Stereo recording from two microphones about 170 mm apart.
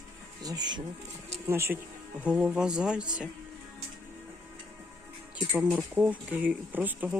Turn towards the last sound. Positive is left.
turn(degrees=-10)  # may be behind; listen again after turning